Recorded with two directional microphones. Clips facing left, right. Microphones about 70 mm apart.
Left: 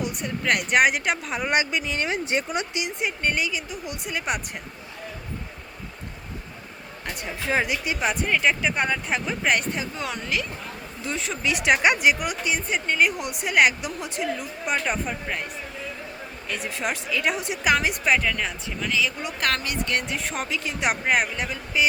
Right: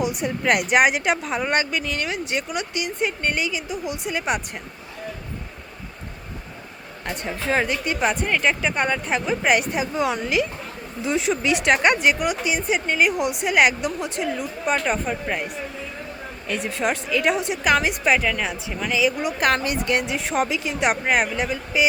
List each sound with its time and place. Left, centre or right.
0.0 s speech: centre
1.5 s speech: centre
3.0 s speech: centre
7.2 s speech: centre